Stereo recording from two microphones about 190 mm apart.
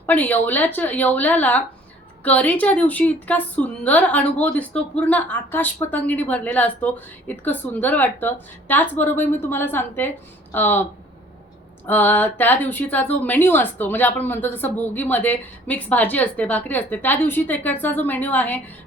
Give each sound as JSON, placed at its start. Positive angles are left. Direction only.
{"t": 0.0, "sound": "a woman's voice", "side_deg": 10}
{"t": 11.9, "sound": "a woman's voice", "side_deg": 10}